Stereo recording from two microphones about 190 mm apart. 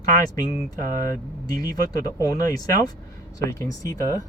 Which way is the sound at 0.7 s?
45° right (ahead or behind).